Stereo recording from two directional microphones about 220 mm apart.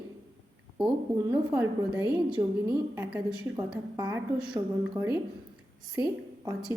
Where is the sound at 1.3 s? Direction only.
10° right (ahead or behind).